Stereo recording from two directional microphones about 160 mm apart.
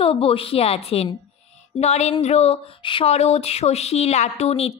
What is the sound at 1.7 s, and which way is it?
Speech, 45° left (ahead or behind).